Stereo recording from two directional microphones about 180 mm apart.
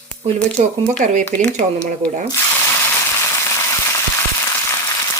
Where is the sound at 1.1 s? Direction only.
40° right (ahead or behind).